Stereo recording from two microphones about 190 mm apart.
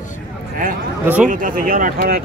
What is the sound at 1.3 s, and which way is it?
Speech, 45° right (ahead or behind).